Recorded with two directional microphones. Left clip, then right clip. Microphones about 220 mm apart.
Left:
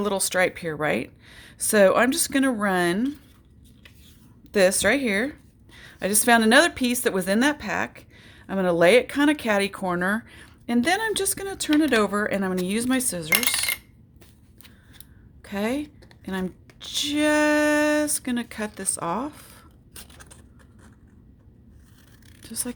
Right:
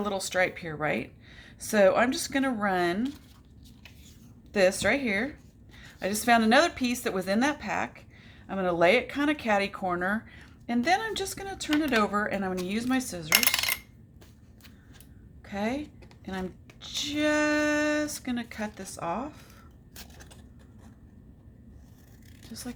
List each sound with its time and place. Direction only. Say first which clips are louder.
0.0 s a woman's voice: left 5 dB; 50° left (ahead or behind)
4.5 s a woman's voice: left 4 dB; 50° left (ahead or behind)
15.4 s a woman's voice: left 5 dB; 50° left (ahead or behind)
20.0 s a sound: left 2 dB; centre (ahead or behind)
22.4 s speech: left 7 dB; 50° left (ahead or behind)